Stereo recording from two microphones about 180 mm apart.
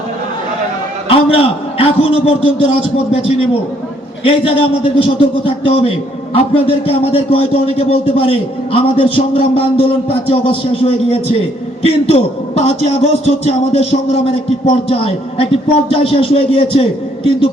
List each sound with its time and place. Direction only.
1.1 s a man's voice: 30° left (ahead or behind)